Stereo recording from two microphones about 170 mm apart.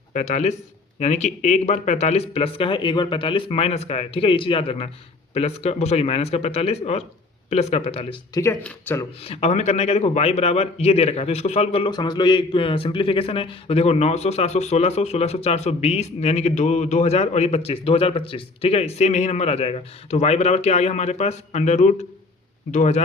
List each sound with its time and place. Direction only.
0.1 s a man's voice: 40° left (ahead or behind)
8.3 s speech: 20° left (ahead or behind)
9.2 s a man's voice: 35° left (ahead or behind)